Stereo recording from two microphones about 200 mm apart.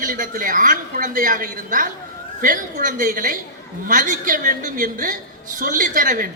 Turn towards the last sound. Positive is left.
turn(degrees=-45)  # may be behind; listen again after turning